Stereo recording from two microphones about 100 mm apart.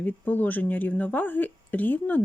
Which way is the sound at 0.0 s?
15° left (ahead or behind).